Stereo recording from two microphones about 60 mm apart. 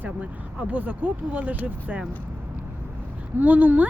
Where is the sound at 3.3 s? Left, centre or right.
Right.